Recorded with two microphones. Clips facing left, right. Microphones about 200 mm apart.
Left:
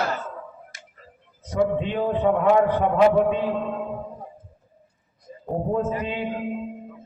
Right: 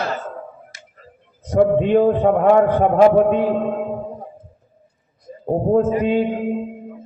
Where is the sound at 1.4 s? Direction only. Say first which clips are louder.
Right 8 dB; 55° right (ahead or behind).